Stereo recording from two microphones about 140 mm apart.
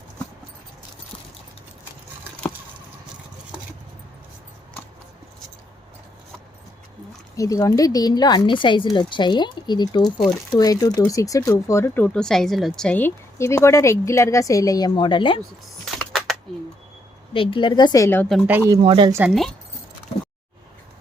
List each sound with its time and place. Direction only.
7.3 s a woman's voice: 25° left (ahead or behind)
16.0 s a sound: centre (ahead or behind)
17.3 s a woman's voice: 40° left (ahead or behind); by 18.3 s 20° left (ahead or behind)
18.4 s speech: 15° right (ahead or behind)
18.8 s speech: 40° right (ahead or behind)